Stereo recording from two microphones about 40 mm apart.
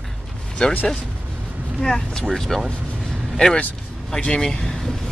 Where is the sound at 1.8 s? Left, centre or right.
Centre.